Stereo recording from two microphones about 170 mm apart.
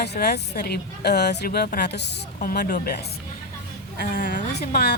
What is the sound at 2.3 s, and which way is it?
A woman's voice, 60° left (ahead or behind).